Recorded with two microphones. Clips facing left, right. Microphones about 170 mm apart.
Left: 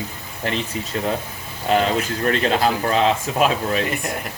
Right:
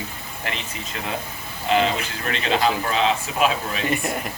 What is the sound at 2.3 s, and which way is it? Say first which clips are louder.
A man's voice: left 2 dB; 40° left (ahead or behind).